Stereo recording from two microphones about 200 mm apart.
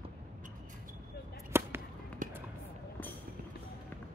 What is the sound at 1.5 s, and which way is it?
Fireworks, 10° right (ahead or behind).